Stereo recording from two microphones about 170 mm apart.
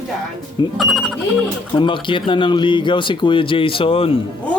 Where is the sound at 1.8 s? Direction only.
30° left (ahead or behind).